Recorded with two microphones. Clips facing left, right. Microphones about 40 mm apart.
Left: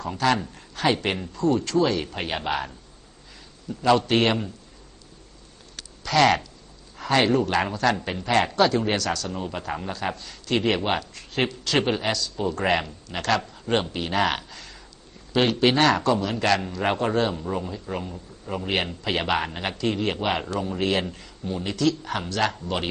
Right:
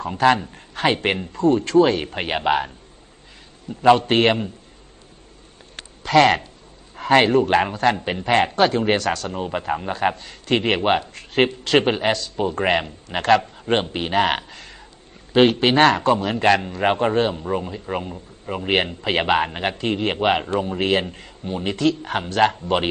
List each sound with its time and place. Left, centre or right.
0.5 s speech: right
3.7 s speech: right
5.7 s a sound: right
6.9 s a man's voice: right